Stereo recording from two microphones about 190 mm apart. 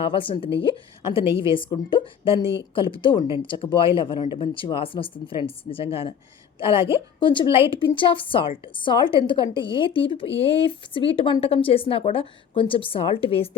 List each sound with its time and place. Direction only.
0.0 s a woman's voice: 30° left (ahead or behind)